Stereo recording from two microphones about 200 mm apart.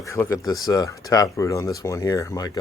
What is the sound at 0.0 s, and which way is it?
Speech, 15° left (ahead or behind).